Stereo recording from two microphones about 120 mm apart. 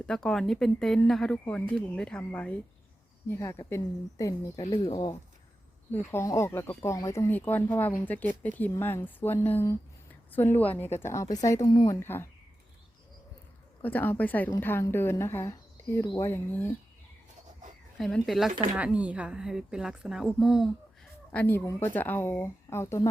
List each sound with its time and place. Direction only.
0.0 s speech: 5° left (ahead or behind)
3.2 s speech: 25° left (ahead or behind)
5.9 s speech: 20° left (ahead or behind)
11.9 s speech: 20° left (ahead or behind)
13.8 s speech: 15° left (ahead or behind)
17.9 s speech: centre (ahead or behind)
21.3 s speech: 20° left (ahead or behind)